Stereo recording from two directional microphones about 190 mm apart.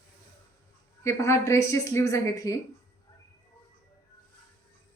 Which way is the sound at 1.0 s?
15° left (ahead or behind).